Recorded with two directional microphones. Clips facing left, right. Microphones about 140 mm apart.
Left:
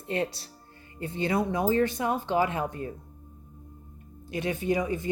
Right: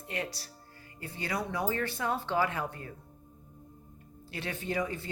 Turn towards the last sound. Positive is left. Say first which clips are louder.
# left 6 dB
turn(degrees=15)  # may be behind; listen again after turning